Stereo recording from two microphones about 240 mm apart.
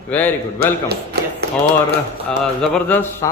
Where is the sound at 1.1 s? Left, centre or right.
Right.